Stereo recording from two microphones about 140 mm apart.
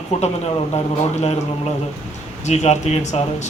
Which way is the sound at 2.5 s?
55° left (ahead or behind).